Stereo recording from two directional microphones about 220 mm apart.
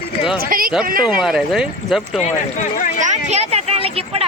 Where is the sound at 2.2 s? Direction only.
35° left (ahead or behind).